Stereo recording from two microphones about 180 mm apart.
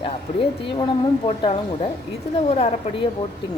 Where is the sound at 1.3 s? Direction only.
35° left (ahead or behind).